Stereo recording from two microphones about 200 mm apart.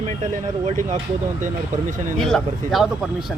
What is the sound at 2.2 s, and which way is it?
Speech, centre (ahead or behind).